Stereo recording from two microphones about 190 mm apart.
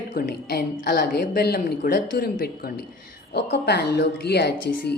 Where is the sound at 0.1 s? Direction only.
50° left (ahead or behind).